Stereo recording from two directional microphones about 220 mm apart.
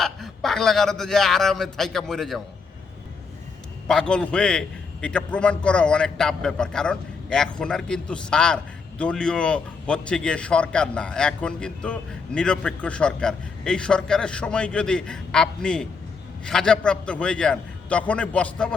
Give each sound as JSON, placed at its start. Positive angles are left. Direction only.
{"t": 0.0, "sound": "a man's voice", "side_deg": 0}
{"t": 3.8, "sound": "a man's voice", "side_deg": 5}